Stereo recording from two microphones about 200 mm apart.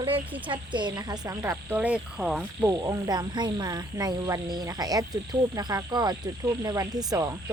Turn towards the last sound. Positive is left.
turn(degrees=-20)  # may be behind; listen again after turning